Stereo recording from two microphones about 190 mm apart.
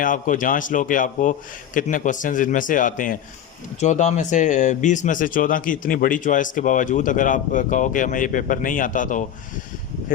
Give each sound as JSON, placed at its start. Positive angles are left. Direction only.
{"t": 0.0, "sound": "speech", "side_deg": 45}